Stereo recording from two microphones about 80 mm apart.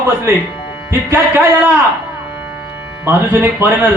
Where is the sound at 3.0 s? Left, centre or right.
Right.